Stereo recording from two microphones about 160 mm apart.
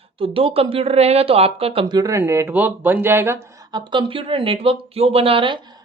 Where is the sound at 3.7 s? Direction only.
30° right (ahead or behind).